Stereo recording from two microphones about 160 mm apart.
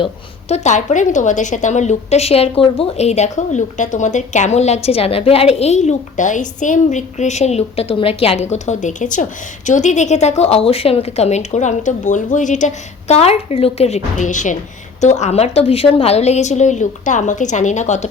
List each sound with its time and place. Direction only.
0.0 s a woman's voice: 40° left (ahead or behind)